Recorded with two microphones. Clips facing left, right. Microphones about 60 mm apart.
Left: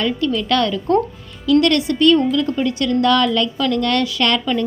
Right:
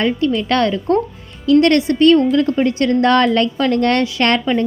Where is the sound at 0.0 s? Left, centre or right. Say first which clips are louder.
Right 3 dB; right.